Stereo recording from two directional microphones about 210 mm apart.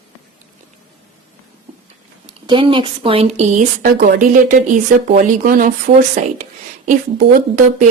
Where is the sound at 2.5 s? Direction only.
25° right (ahead or behind).